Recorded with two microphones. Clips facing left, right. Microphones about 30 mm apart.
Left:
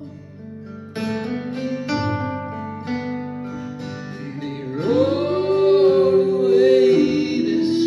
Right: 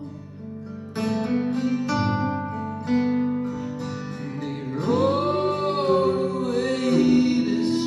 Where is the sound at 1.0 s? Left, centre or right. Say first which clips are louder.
Right 1 dB; left.